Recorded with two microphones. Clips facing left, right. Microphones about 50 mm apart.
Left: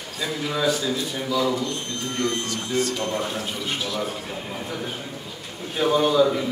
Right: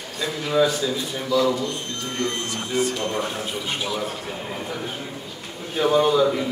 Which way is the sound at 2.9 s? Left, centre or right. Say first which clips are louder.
Right 1 dB; centre.